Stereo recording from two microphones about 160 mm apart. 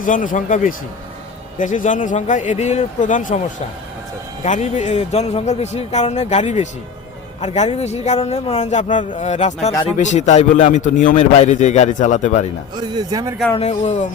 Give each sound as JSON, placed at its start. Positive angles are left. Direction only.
{"t": 0.0, "sound": "a man's voice", "side_deg": 55}
{"t": 4.4, "sound": "a man's voice", "side_deg": 50}
{"t": 12.7, "sound": "speech", "side_deg": -25}
{"t": 13.5, "sound": "a man's voice", "side_deg": 45}